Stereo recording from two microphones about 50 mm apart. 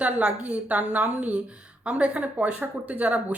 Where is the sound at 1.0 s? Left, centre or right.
Right.